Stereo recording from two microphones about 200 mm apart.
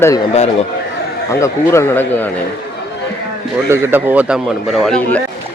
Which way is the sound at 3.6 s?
10° right (ahead or behind).